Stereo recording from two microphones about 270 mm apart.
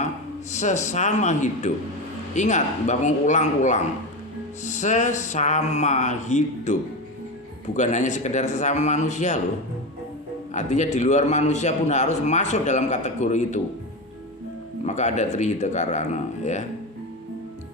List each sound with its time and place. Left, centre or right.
0.5 s a man's voice: left
10.5 s a man's voice: left
14.8 s a man's voice: left